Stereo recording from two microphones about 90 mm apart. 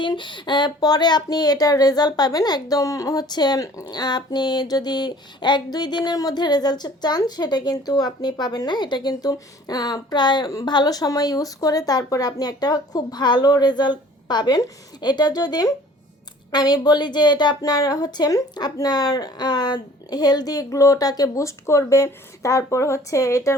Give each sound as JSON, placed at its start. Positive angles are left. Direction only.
{"t": 0.0, "sound": "a woman's voice", "side_deg": 60}